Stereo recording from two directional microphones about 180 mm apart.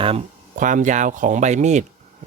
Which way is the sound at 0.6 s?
45° right (ahead or behind).